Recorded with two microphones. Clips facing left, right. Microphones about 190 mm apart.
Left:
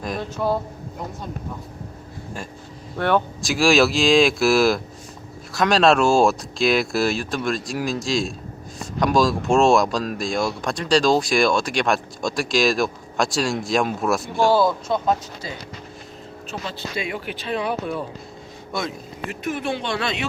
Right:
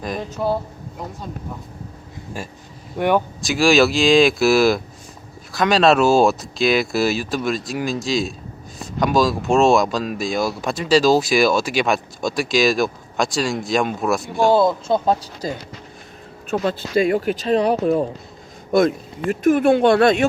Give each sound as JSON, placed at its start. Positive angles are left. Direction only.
{"t": 0.0, "sound": "speech", "side_deg": 0}
{"t": 3.0, "sound": "speech", "side_deg": -10}
{"t": 3.4, "sound": "speech", "side_deg": 0}
{"t": 14.5, "sound": "speech", "side_deg": -20}
{"t": 16.5, "sound": "speech", "side_deg": -50}
{"t": 18.7, "sound": "speech", "side_deg": -55}